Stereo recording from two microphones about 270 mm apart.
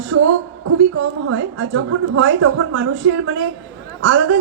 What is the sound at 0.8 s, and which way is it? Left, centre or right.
A woman's voice, right.